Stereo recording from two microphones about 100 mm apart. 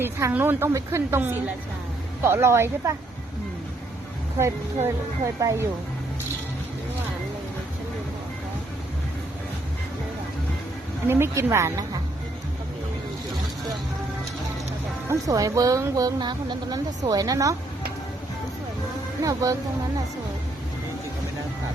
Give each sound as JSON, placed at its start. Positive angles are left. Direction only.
{"t": 0.0, "sound": "a woman's voice", "side_deg": -20}
{"t": 4.4, "sound": "a woman's voice", "side_deg": -30}
{"t": 11.1, "sound": "a woman's voice", "side_deg": -25}
{"t": 15.1, "sound": "speech", "side_deg": -35}
{"t": 19.2, "sound": "speech", "side_deg": -35}